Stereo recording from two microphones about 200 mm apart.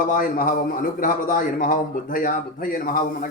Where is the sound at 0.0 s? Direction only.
45° left (ahead or behind).